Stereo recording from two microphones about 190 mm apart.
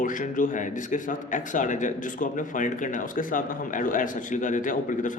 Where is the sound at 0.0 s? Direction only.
45° left (ahead or behind).